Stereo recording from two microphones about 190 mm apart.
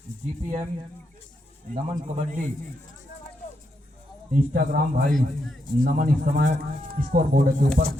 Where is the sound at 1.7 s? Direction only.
35° right (ahead or behind).